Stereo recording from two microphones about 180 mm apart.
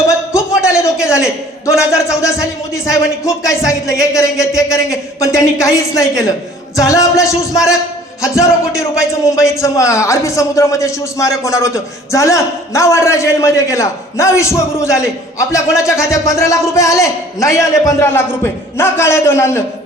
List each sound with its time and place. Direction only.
0.3 s a sound: 15° left (ahead or behind)
2.9 s a man's voice: 15° left (ahead or behind)
9.0 s a man's voice: 15° left (ahead or behind)